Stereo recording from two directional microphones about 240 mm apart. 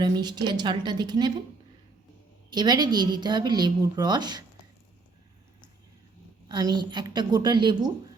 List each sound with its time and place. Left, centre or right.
0.0 s a woman's voice: centre
2.5 s a woman's voice: centre
6.5 s a woman's voice: centre